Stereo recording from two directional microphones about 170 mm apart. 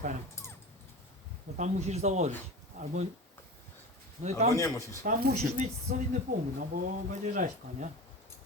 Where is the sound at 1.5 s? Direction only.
40° right (ahead or behind).